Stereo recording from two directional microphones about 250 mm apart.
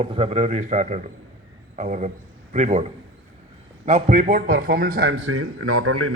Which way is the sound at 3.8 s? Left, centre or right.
Right.